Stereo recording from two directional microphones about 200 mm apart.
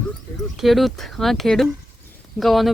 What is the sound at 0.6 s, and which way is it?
Speech, centre (ahead or behind).